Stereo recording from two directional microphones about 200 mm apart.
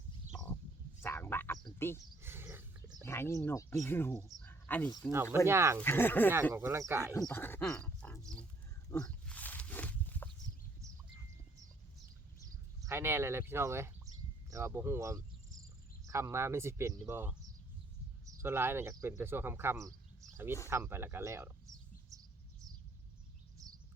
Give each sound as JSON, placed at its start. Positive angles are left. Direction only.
{"t": 0.3, "sound": "bird", "side_deg": 0}
{"t": 1.0, "sound": "a sound", "side_deg": 10}
{"t": 2.2, "sound": "wild animals", "side_deg": -10}
{"t": 3.0, "sound": "speech", "side_deg": 10}
{"t": 4.3, "sound": "a sound", "side_deg": 10}
{"t": 5.1, "sound": "speech", "side_deg": -10}
{"t": 5.8, "sound": "speech", "side_deg": 10}
{"t": 6.5, "sound": "speech", "side_deg": -15}
{"t": 7.2, "sound": "speech", "side_deg": 5}
{"t": 8.9, "sound": "wild animals", "side_deg": 5}
{"t": 12.8, "sound": "speech", "side_deg": -10}
{"t": 18.4, "sound": "speech", "side_deg": -10}
{"t": 23.6, "sound": "bird", "side_deg": -15}